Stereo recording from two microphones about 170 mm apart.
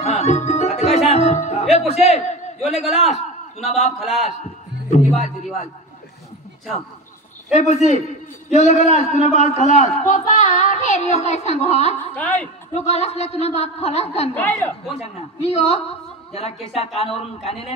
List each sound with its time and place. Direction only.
0.0 s speech: 40° left (ahead or behind)
2.8 s a man's voice: centre (ahead or behind)
3.1 s a man's voice: 40° left (ahead or behind)
4.0 s a man's voice: centre (ahead or behind)
4.9 s speech: 40° left (ahead or behind)
7.5 s speech: 40° left (ahead or behind)
12.2 s a woman's voice: 10° left (ahead or behind)
12.7 s speech: 40° left (ahead or behind)
14.3 s a woman's voice: 10° left (ahead or behind)
15.1 s speech: 35° left (ahead or behind)